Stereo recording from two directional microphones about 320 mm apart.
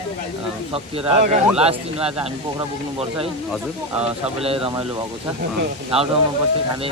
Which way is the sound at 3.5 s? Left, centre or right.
Centre.